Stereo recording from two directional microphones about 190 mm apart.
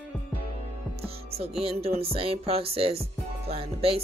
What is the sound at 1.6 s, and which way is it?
Speech, 30° right (ahead or behind).